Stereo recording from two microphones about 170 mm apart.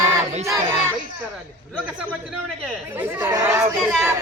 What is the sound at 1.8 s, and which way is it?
Speech, 5° right (ahead or behind).